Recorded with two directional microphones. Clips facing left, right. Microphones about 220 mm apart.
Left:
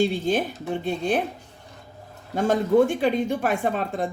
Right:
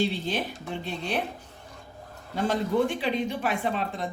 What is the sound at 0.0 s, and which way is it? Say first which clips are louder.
Speech: left 6 dB; 45° left (ahead or behind).